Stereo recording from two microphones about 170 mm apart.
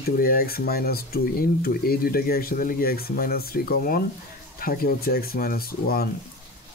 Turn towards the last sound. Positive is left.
turn(degrees=60)  # may be behind; listen again after turning